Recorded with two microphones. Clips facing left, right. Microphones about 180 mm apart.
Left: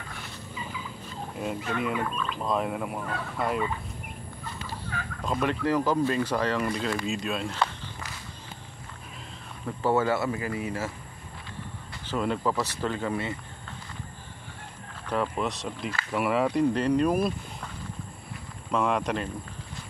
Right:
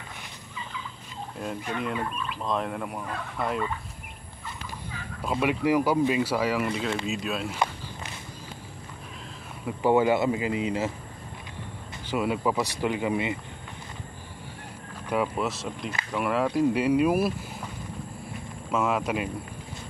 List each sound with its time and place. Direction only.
1.4 s speech: 5° left (ahead or behind)
4.8 s speech: 10° right (ahead or behind)
9.7 s speech: 15° right (ahead or behind)
12.1 s speech: 10° right (ahead or behind)
15.0 s speech: 5° right (ahead or behind)
18.7 s speech: 5° right (ahead or behind)